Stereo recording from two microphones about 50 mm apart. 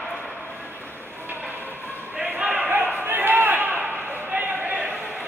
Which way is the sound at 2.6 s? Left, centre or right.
Right.